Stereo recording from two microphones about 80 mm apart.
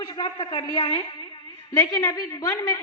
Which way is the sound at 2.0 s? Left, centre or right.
Left.